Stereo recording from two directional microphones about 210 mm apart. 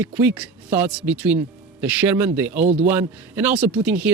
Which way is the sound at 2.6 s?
30° right (ahead or behind).